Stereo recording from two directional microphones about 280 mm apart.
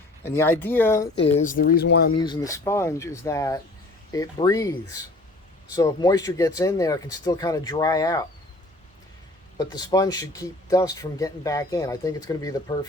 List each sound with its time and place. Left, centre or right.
0.2 s speech: centre
1.5 s speech: left
2.2 s speech: centre
9.6 s speech: centre